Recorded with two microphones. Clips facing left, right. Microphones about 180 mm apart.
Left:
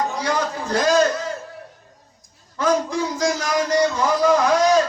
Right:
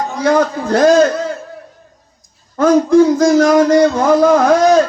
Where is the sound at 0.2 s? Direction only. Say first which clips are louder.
Right 10 dB; 50° right (ahead or behind).